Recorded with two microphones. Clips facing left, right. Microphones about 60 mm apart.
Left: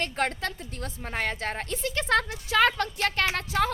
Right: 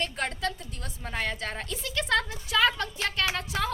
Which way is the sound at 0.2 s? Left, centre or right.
Left.